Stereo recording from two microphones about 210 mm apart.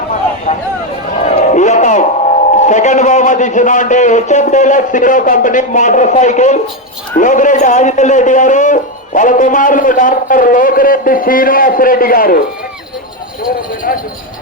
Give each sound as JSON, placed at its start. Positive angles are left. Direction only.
{"t": 0.5, "sound": "a sound", "side_deg": 35}
{"t": 1.2, "sound": "music", "side_deg": 30}
{"t": 2.6, "sound": "a man's voice", "side_deg": 35}
{"t": 13.9, "sound": "speech", "side_deg": 40}